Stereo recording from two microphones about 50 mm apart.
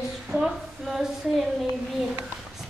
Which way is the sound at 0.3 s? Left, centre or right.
Centre.